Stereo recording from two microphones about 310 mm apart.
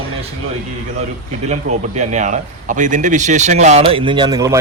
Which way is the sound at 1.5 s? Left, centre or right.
Right.